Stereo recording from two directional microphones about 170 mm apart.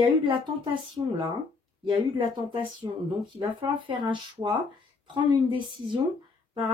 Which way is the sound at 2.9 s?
30° right (ahead or behind).